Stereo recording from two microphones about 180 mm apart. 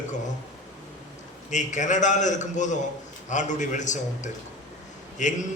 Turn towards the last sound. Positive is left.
turn(degrees=45)  # may be behind; listen again after turning